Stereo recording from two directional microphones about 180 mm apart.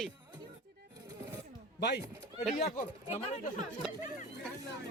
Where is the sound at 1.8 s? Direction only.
70° left (ahead or behind).